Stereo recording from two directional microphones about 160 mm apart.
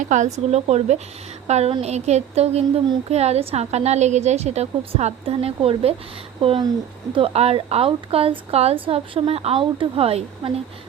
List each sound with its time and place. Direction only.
0.0 s a woman's voice: 50° right (ahead or behind)